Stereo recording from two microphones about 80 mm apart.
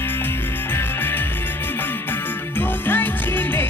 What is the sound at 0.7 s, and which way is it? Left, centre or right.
Music, left.